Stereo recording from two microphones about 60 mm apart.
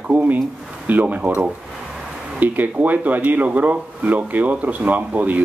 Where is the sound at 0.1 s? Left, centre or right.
Right.